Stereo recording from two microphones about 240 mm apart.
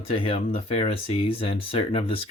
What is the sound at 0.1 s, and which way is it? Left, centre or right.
Speech, left.